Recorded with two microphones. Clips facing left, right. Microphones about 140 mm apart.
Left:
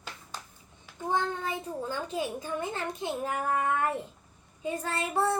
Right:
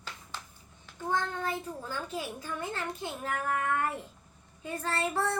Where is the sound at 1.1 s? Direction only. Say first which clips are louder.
Left 1 dB; 20° left (ahead or behind).